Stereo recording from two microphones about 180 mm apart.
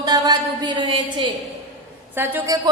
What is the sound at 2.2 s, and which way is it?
Speech, 10° right (ahead or behind).